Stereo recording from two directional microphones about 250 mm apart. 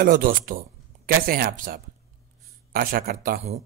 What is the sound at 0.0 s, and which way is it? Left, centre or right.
Speech, right.